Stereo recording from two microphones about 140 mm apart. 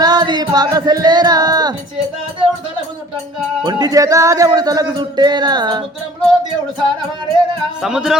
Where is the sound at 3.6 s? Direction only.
30° right (ahead or behind).